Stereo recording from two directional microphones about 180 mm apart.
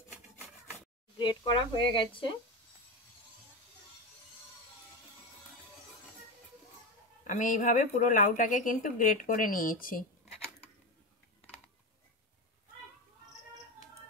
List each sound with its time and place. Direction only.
1.1 s speech: 25° left (ahead or behind)
7.2 s speech: 45° left (ahead or behind)